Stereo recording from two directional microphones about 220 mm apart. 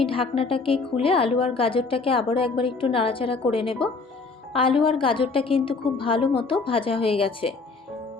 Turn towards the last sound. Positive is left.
turn(degrees=25)  # may be behind; listen again after turning